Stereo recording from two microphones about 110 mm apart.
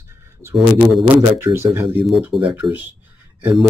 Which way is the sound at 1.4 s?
25° right (ahead or behind).